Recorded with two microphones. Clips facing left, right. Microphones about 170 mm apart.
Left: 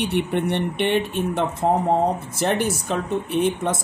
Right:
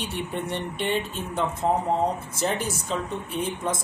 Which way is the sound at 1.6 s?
60° left (ahead or behind).